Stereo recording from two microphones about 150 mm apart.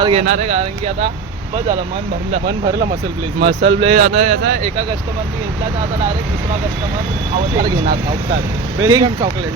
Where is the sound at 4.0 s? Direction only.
55° right (ahead or behind).